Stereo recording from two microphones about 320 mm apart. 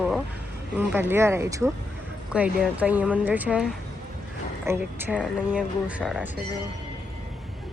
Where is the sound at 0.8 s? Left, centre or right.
Centre.